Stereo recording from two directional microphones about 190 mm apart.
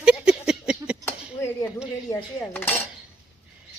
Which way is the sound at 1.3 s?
15° left (ahead or behind).